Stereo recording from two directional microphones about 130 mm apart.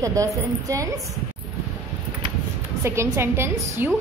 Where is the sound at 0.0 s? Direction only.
25° right (ahead or behind).